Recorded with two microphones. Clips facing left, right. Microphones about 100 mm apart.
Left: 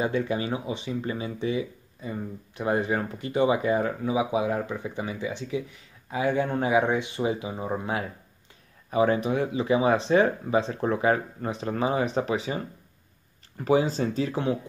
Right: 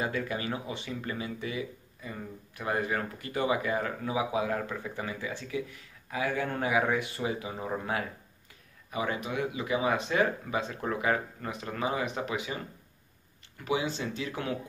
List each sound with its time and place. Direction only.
0.0 s speech: 25° left (ahead or behind)
8.9 s speech: 35° left (ahead or behind)